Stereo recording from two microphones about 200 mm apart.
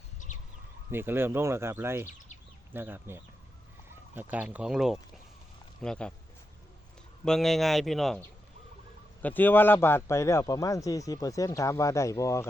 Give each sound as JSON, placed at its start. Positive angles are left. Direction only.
{"t": 0.9, "sound": "a man's voice", "side_deg": -10}
{"t": 7.3, "sound": "a man's voice", "side_deg": 0}